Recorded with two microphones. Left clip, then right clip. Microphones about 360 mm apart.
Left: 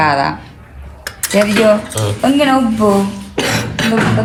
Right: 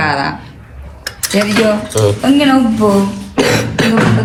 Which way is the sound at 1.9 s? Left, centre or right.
Centre.